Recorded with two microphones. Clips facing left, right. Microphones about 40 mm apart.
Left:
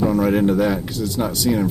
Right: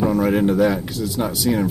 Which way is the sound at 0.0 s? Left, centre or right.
Centre.